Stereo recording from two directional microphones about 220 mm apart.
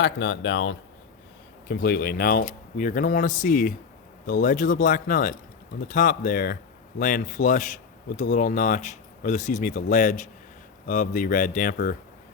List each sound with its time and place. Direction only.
0.0 s speech: 55° left (ahead or behind)
1.6 s a man's voice: 45° left (ahead or behind)